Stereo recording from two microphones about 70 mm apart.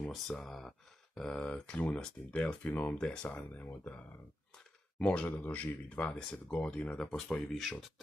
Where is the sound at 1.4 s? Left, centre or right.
Left.